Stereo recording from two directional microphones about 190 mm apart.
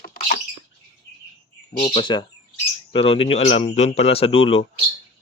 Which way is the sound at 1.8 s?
25° left (ahead or behind).